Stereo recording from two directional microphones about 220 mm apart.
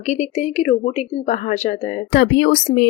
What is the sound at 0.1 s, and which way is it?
Speech, 30° left (ahead or behind).